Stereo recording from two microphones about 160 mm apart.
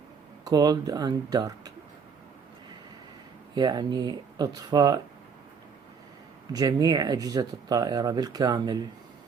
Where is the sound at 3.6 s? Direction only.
25° right (ahead or behind).